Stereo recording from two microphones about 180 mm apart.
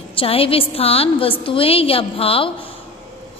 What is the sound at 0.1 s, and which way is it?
A woman's voice, 30° left (ahead or behind).